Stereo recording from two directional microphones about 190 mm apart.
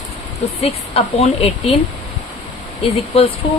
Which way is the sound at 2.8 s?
30° left (ahead or behind).